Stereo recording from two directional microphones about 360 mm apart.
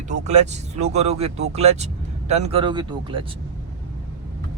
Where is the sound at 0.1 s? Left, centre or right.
Centre.